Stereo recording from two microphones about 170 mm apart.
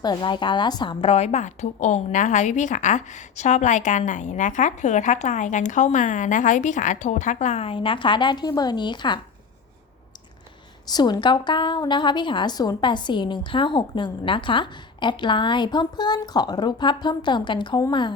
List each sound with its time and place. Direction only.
0.0 s a woman's voice: 25° left (ahead or behind)
10.8 s a woman's voice: 25° left (ahead or behind)